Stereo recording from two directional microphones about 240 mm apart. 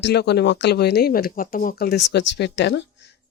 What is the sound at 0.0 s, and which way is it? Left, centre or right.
Speech, left.